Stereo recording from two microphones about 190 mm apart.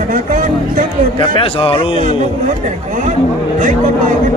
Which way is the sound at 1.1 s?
25° left (ahead or behind).